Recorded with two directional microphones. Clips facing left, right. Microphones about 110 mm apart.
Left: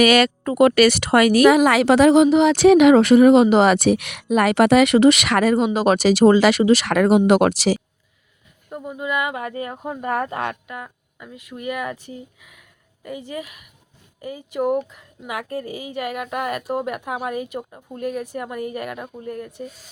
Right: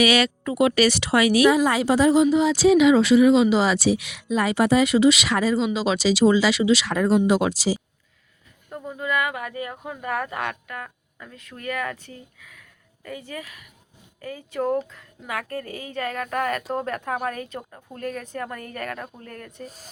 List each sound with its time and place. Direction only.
0.0 s speech: 50° left (ahead or behind)
1.5 s speech: 75° left (ahead or behind); by 6.9 s 55° left (ahead or behind)
6.9 s speech: 70° left (ahead or behind)
8.7 s a woman's voice: 15° left (ahead or behind)
19.6 s speech: 40° right (ahead or behind)